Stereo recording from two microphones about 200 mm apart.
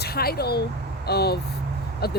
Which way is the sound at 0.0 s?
50° left (ahead or behind).